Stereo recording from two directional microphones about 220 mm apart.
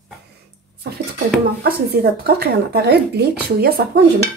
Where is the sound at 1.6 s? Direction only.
45° right (ahead or behind).